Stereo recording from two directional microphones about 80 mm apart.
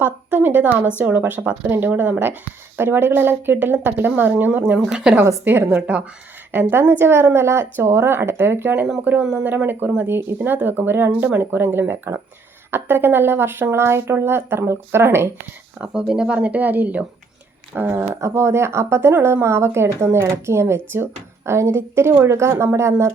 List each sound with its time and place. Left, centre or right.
0.0 s speech: right
4.9 s speech: centre
5.2 s speech: right
16.0 s speech: centre
17.7 s speech: right